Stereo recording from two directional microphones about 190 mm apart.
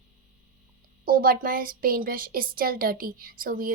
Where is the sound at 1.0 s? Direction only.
50° right (ahead or behind).